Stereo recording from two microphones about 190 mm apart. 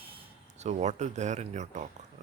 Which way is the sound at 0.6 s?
35° right (ahead or behind).